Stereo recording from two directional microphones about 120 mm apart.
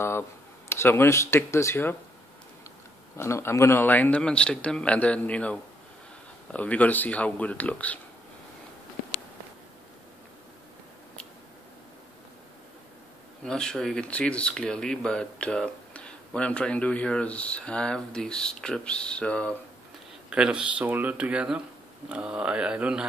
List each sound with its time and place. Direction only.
0.7 s speech: 20° left (ahead or behind)
3.2 s speech: 20° left (ahead or behind)
13.4 s speech: 5° left (ahead or behind)
20.2 s speech: 5° right (ahead or behind)